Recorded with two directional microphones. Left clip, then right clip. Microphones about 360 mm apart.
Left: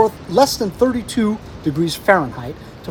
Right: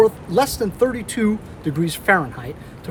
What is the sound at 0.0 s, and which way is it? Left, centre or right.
Speech, centre.